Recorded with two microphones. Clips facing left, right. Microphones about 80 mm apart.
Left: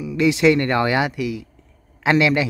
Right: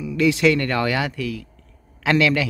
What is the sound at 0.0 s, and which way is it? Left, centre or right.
Speech, centre.